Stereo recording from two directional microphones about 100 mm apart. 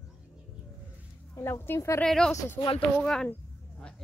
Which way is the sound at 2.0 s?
5° left (ahead or behind).